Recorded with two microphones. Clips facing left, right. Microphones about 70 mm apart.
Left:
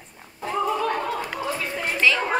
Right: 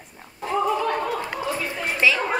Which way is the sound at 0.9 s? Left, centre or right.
Centre.